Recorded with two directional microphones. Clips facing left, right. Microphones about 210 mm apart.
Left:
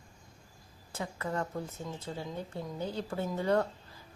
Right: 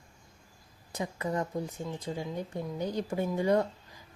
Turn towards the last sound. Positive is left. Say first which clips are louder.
# right 2 dB
turn(degrees=-15)  # may be behind; listen again after turning